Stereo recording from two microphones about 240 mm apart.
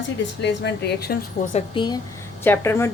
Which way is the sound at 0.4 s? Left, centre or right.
Left.